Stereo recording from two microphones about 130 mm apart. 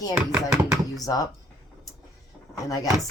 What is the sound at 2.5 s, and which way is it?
Speech, 30° left (ahead or behind).